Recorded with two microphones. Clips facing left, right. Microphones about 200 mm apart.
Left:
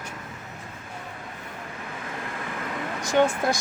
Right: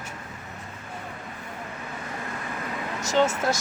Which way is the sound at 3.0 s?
15° left (ahead or behind).